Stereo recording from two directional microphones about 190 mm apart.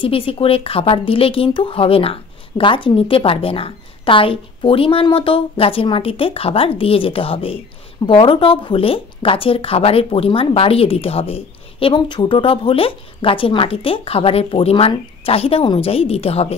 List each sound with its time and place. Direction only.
0.0 s speech: 30° left (ahead or behind)